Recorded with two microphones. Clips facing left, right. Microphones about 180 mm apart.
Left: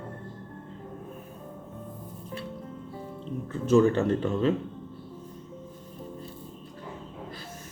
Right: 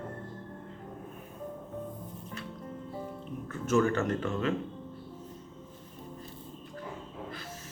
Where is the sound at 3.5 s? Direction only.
30° left (ahead or behind).